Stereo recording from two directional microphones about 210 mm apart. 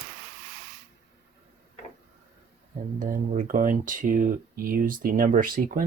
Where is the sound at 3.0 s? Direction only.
40° right (ahead or behind).